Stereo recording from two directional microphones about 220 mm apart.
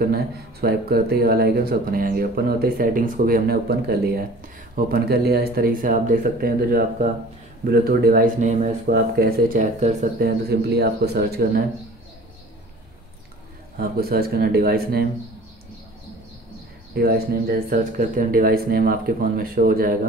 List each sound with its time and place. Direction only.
0.1 s speech: 45° right (ahead or behind)
10.1 s speech: 45° right (ahead or behind)
13.7 s speech: 45° right (ahead or behind)
16.9 s speech: 45° right (ahead or behind)